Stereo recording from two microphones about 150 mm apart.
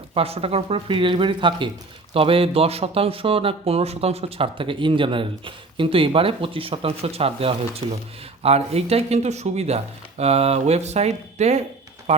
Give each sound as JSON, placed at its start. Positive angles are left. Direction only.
{"t": 0.1, "sound": "speech", "side_deg": -40}